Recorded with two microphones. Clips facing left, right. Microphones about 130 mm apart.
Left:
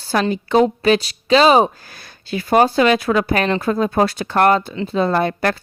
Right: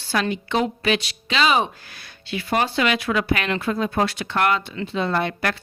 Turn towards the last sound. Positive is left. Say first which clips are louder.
# left 6 dB
turn(degrees=40)  # may be behind; listen again after turning